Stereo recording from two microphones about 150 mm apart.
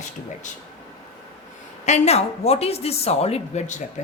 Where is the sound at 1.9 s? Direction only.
45° left (ahead or behind).